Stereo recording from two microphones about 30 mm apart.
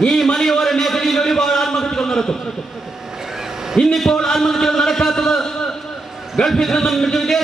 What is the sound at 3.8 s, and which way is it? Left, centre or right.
Speech, left.